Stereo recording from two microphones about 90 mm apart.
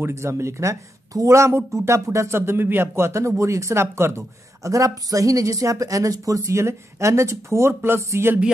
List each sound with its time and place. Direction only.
0.0 s speech: 30° right (ahead or behind)